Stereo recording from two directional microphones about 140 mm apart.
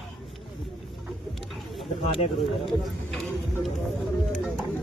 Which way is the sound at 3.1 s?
5° left (ahead or behind).